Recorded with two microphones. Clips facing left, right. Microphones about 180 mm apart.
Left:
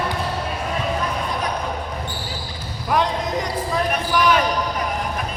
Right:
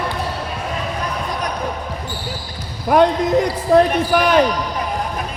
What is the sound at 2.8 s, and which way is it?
Basketball bounce, 55° right (ahead or behind).